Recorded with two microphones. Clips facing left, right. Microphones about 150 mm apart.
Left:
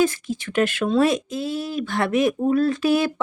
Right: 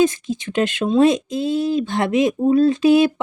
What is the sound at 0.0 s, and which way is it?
Speech, 20° right (ahead or behind).